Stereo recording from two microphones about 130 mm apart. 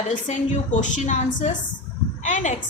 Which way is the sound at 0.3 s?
70° left (ahead or behind).